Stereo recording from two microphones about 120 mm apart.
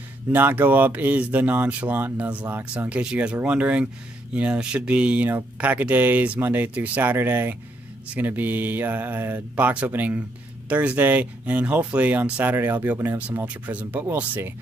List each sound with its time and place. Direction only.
0.3 s speech: 15° right (ahead or behind)